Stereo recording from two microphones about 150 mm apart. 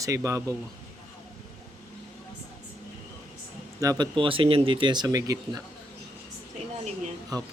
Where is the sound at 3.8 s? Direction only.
20° right (ahead or behind).